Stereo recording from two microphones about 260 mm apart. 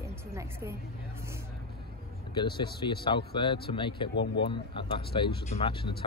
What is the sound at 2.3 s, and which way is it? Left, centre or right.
Speech, centre.